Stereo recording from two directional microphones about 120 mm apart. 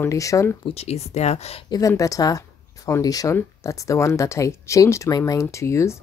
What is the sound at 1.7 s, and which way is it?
Speech, 25° left (ahead or behind).